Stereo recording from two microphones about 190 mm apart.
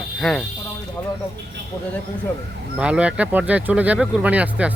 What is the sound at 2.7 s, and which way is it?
Speech, 5° right (ahead or behind).